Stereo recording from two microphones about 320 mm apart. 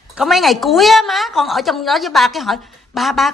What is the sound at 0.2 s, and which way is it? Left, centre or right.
A woman's voice, centre.